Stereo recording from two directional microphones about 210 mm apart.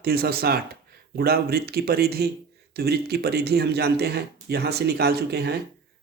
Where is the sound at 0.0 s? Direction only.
45° right (ahead or behind).